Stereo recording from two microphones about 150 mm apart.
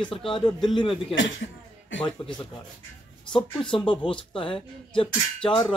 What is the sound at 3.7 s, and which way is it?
A man's voice, 30° left (ahead or behind).